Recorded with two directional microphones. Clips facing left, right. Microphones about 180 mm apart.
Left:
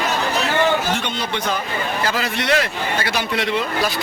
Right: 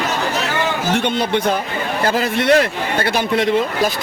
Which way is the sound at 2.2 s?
50° right (ahead or behind).